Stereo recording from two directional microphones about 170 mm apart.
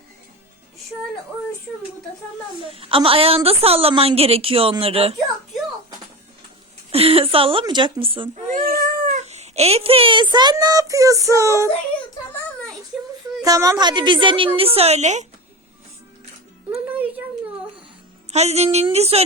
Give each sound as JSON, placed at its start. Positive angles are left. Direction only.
{"t": 2.6, "sound": "a woman's voice", "side_deg": -35}
{"t": 6.9, "sound": "a woman's voice", "side_deg": -35}
{"t": 8.4, "sound": "speech", "side_deg": -55}
{"t": 13.4, "sound": "a woman's voice", "side_deg": -20}
{"t": 18.3, "sound": "a woman's voice", "side_deg": -40}